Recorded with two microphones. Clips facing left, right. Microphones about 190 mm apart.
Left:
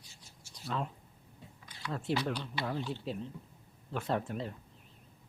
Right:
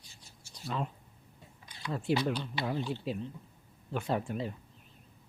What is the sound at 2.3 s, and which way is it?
Speech, 15° right (ahead or behind).